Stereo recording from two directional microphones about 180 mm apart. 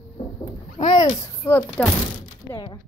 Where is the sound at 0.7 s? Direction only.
25° left (ahead or behind).